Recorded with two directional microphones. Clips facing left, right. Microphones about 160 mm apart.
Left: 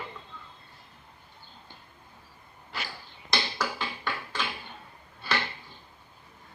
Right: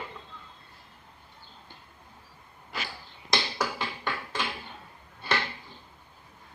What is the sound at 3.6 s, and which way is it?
Music, 20° right (ahead or behind).